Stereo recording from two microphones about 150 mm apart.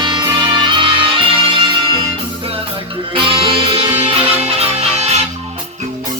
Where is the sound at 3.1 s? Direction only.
35° right (ahead or behind).